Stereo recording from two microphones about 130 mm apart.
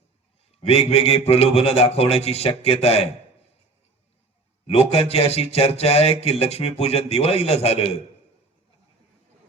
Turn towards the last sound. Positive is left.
turn(degrees=55)  # may be behind; listen again after turning